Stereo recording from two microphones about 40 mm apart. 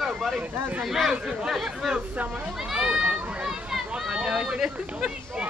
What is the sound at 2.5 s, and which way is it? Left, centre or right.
Speech, centre.